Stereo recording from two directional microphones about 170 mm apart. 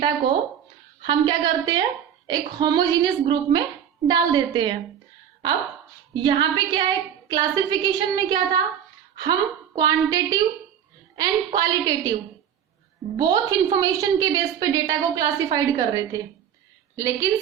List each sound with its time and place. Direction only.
0.0 s a woman's voice: 30° right (ahead or behind)
6.1 s a woman's voice: 25° right (ahead or behind)
13.1 s a woman's voice: 20° right (ahead or behind)